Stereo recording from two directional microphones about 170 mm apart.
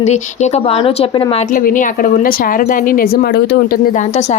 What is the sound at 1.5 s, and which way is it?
A woman's voice, 50° left (ahead or behind).